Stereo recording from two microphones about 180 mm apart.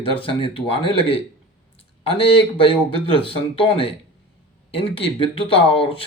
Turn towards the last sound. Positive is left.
turn(degrees=30)  # may be behind; listen again after turning